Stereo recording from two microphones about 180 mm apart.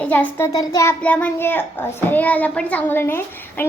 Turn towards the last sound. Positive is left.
turn(degrees=10)  # may be behind; listen again after turning